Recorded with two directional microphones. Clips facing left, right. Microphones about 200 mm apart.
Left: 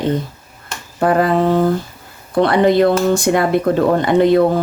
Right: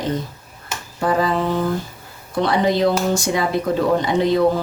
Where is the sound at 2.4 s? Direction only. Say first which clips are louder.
Left 5 dB; 60° left (ahead or behind).